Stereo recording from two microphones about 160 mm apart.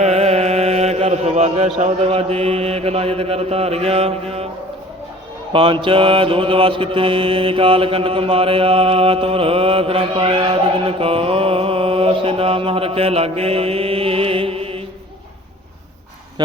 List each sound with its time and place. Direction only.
0.0 s chant: 40° right (ahead or behind)
5.8 s mantra: 30° right (ahead or behind)